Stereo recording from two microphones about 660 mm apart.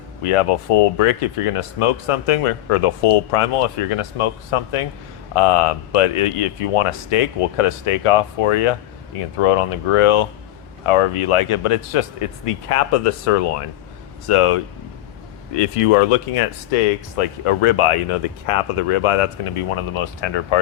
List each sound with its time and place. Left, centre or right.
0.2 s speech: left